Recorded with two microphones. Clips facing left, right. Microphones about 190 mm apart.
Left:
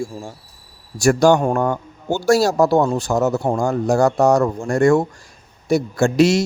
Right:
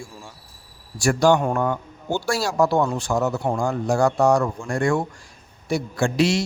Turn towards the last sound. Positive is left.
turn(degrees=45)  # may be behind; listen again after turning